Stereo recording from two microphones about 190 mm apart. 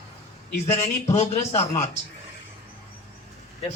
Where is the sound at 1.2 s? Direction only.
35° left (ahead or behind).